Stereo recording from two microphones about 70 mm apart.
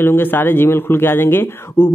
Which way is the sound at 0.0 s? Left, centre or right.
Left.